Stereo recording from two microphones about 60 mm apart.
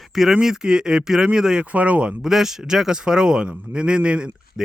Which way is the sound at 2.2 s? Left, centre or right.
Centre.